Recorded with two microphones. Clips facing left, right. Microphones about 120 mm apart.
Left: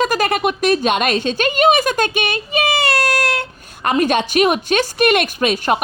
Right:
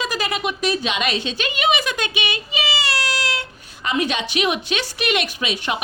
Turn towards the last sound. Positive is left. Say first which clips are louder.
# left 8 dB
turn(degrees=50)  # may be behind; listen again after turning